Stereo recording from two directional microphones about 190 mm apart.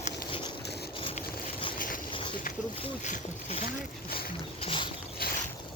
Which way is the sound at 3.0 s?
35° left (ahead or behind).